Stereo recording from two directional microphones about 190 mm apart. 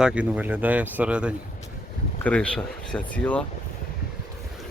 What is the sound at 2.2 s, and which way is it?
Speech, 5° left (ahead or behind).